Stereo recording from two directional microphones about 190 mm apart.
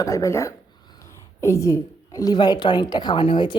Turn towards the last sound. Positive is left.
turn(degrees=25)  # may be behind; listen again after turning